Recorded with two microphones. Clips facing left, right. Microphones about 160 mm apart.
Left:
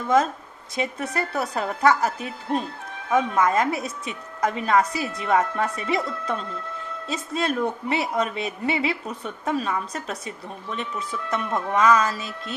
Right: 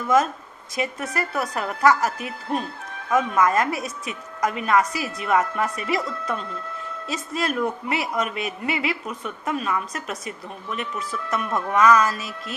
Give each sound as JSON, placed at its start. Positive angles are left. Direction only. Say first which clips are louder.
{"t": 1.1, "sound": "a woman's voice", "louder": "even", "side_deg": 25}